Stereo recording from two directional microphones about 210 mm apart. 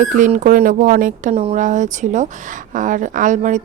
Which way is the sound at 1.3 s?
30° right (ahead or behind).